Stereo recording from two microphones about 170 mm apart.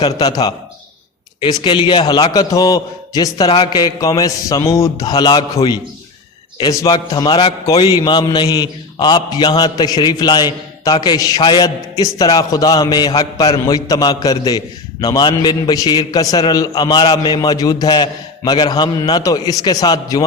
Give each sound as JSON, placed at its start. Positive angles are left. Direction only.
{"t": 0.0, "sound": "a man's voice", "side_deg": 25}